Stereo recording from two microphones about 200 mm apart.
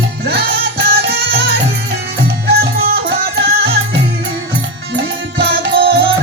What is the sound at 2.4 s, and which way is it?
Music, 50° right (ahead or behind).